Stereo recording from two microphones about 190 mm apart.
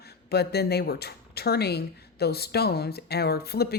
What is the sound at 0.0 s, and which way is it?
A woman's voice, 60° left (ahead or behind).